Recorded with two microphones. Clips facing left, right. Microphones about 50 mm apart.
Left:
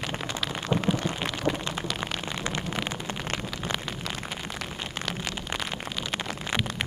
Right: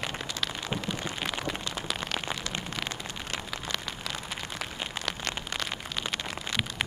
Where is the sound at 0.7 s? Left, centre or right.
Centre.